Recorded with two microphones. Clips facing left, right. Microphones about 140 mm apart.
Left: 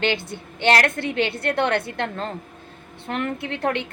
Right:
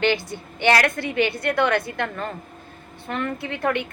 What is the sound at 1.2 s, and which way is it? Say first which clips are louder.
Speech: right 3 dB; 60° left (ahead or behind).